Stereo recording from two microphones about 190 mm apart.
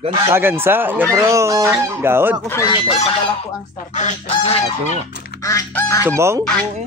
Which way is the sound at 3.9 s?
40° left (ahead or behind).